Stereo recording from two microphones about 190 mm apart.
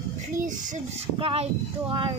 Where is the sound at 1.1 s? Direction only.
30° right (ahead or behind).